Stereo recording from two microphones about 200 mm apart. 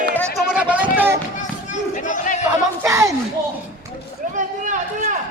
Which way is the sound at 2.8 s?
15° right (ahead or behind).